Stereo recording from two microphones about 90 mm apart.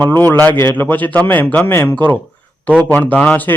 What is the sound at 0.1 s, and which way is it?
A man's voice, 25° left (ahead or behind).